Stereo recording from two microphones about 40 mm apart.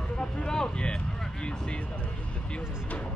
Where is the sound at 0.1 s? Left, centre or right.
Left.